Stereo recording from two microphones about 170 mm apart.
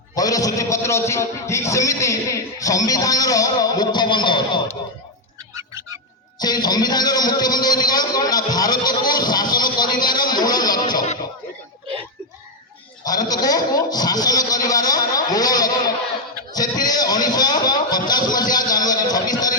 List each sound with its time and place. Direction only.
0.2 s a man's voice: 20° left (ahead or behind)
6.4 s a man's voice: 25° left (ahead or behind)
13.1 s a man's voice: 20° left (ahead or behind)
16.5 s a sound: 20° left (ahead or behind)